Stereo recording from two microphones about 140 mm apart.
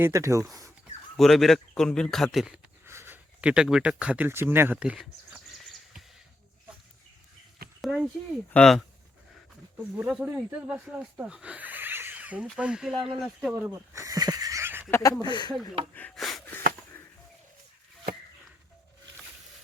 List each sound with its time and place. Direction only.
0.0 s speech: 20° right (ahead or behind)
1.1 s a man's voice: centre (ahead or behind)
2.8 s a sound: 15° right (ahead or behind); by 6.0 s centre (ahead or behind)
7.8 s a man's voice: centre (ahead or behind)
9.7 s a man's voice: 5° right (ahead or behind)
13.5 s speech: 20° right (ahead or behind)
14.8 s speech: 15° left (ahead or behind)
15.2 s speech: 30° left (ahead or behind)
16.1 s wheeze: centre (ahead or behind)